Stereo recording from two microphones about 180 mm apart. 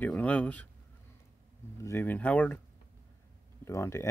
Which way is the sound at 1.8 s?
15° left (ahead or behind).